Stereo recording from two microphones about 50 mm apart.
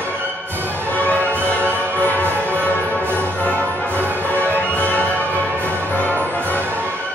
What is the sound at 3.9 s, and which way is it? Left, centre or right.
Music, right.